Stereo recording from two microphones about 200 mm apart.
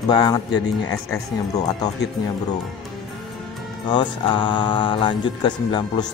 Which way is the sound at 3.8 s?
25° left (ahead or behind).